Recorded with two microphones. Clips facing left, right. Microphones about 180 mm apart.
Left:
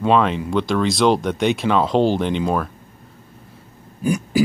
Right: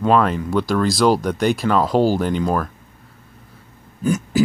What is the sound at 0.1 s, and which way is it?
Speech, 5° right (ahead or behind).